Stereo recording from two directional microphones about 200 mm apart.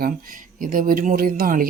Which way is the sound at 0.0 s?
45° right (ahead or behind).